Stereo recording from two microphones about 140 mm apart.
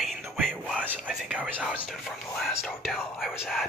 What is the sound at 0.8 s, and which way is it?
Speech, 10° right (ahead or behind).